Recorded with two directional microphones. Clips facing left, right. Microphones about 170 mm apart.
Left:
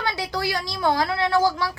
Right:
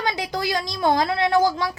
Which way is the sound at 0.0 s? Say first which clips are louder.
Right 1 dB; 20° right (ahead or behind).